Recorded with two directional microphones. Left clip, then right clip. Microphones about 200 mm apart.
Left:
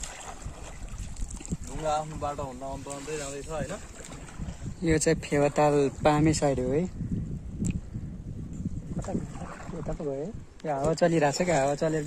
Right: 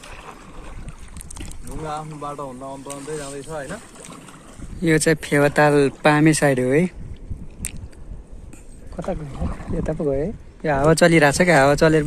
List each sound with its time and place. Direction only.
2.3 s speech: centre (ahead or behind)
2.9 s speech: 20° right (ahead or behind)
4.8 s speech: 5° left (ahead or behind)
8.9 s speech: 35° right (ahead or behind); by 11.7 s 10° right (ahead or behind)
11.7 s speech: 25° right (ahead or behind)